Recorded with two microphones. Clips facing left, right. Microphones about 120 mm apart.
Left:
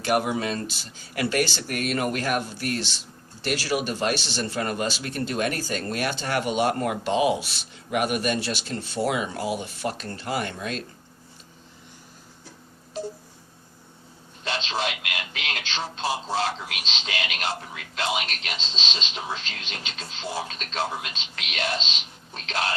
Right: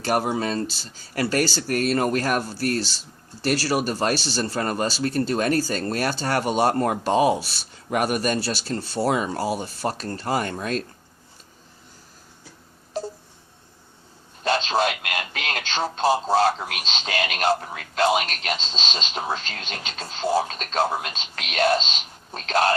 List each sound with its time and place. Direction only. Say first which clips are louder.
0.0 s speech: right 1 dB; 35° right (ahead or behind)
14.4 s speech: right 7 dB; 45° right (ahead or behind)